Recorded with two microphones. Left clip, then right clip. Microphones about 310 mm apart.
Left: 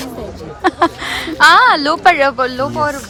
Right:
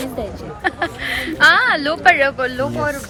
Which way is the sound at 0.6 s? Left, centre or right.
Centre.